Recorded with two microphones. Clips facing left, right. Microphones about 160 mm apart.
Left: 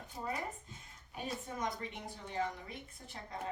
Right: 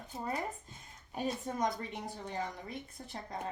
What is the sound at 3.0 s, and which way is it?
Speech, 50° right (ahead or behind).